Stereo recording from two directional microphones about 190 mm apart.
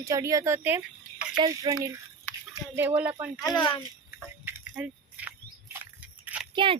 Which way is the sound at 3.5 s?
25° left (ahead or behind).